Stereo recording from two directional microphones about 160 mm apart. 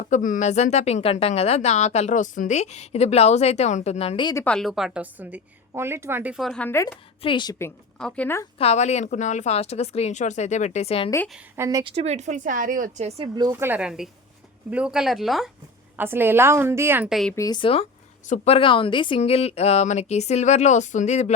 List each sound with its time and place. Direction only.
0.1 s speech: 50° left (ahead or behind)
4.4 s a woman's voice: 5° left (ahead or behind)
6.4 s speech: 5° left (ahead or behind)
7.2 s speech: 30° left (ahead or behind)
7.9 s speech: 5° left (ahead or behind)
8.5 s speech: 40° left (ahead or behind)
11.5 s a woman's voice: 15° right (ahead or behind)
11.8 s speech: 35° right (ahead or behind)
13.5 s a woman's voice: 10° right (ahead or behind)
16.0 s a woman's voice: 15° right (ahead or behind)
17.1 s speech: centre (ahead or behind)
17.3 s speech: 25° left (ahead or behind); by 21.3 s 45° left (ahead or behind)